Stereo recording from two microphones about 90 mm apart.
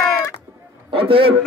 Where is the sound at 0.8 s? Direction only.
90° right.